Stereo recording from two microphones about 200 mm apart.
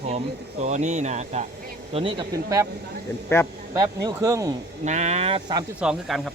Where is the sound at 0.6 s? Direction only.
35° right (ahead or behind); by 2.6 s 15° right (ahead or behind).